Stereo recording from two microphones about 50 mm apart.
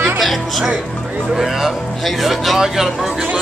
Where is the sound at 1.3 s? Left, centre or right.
Centre.